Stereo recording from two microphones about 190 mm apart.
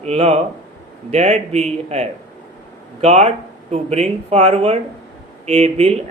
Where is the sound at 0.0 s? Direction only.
35° right (ahead or behind).